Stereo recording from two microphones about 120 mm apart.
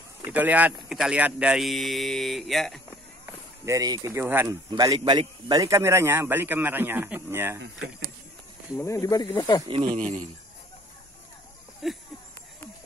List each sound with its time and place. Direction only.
0.3 s speech: 10° right (ahead or behind)
3.3 s speech: 25° right (ahead or behind)
4.5 s a man's voice: 30° right (ahead or behind)
8.7 s speech: 25° left (ahead or behind)
9.7 s speech: 50° right (ahead or behind)
9.9 s speech: 80° right
11.8 s speech: centre (ahead or behind)